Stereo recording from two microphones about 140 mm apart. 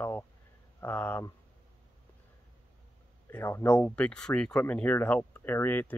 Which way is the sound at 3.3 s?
15° left (ahead or behind).